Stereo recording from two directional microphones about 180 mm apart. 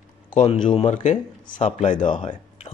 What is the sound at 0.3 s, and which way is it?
Speech, 40° left (ahead or behind).